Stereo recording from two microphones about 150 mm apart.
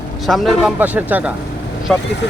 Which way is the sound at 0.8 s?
10° right (ahead or behind).